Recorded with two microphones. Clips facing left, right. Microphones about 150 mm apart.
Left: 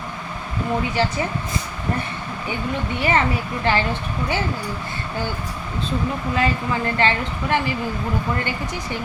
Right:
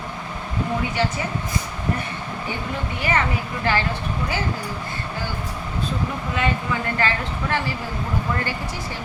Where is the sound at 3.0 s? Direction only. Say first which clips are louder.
Left 3 dB; 25° left (ahead or behind).